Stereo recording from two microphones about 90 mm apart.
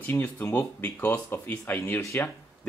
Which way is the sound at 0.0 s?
20° left (ahead or behind).